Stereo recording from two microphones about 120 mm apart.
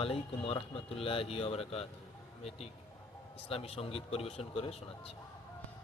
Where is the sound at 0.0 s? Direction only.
55° left (ahead or behind).